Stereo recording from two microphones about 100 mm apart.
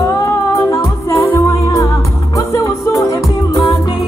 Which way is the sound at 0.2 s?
30° left (ahead or behind).